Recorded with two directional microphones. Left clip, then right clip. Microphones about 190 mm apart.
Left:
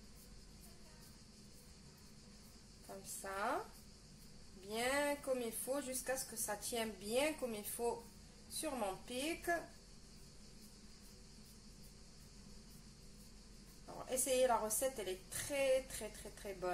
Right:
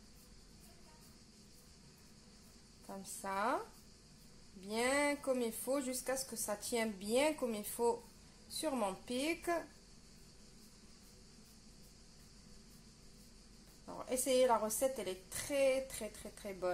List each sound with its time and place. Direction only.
2.9 s a woman's voice: 45° right (ahead or behind)
4.6 s speech: 50° right (ahead or behind)
14.0 s speech: 45° right (ahead or behind)